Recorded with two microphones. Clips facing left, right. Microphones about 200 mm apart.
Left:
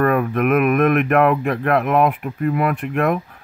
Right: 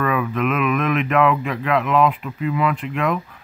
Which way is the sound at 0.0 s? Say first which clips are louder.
Left 4 dB; 55° left (ahead or behind).